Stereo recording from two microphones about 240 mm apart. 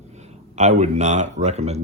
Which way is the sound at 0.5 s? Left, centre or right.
Right.